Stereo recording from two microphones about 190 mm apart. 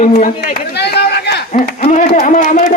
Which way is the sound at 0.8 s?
60° left (ahead or behind).